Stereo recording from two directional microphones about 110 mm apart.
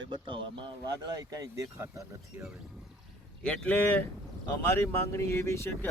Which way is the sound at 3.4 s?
10° left (ahead or behind).